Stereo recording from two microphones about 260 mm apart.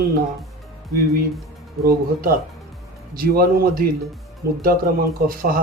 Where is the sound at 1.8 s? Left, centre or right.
Right.